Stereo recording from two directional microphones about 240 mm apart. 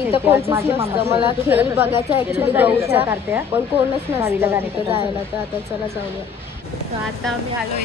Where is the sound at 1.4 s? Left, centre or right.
Centre.